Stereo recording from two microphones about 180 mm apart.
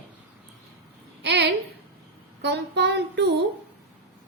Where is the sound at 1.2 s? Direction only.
70° right (ahead or behind).